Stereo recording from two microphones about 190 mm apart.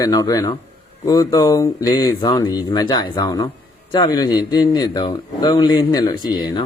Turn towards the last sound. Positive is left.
turn(degrees=20)  # may be behind; listen again after turning